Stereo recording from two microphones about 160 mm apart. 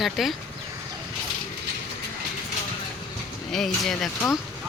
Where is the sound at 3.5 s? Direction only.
Centre (ahead or behind).